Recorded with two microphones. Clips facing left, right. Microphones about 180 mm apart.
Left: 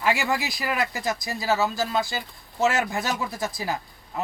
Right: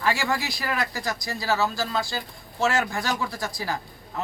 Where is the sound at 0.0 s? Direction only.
15° left (ahead or behind).